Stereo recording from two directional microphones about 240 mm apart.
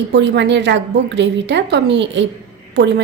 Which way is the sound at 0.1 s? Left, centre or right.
Right.